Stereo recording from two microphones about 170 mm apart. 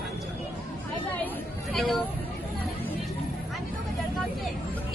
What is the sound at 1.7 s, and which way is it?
Speech, centre (ahead or behind).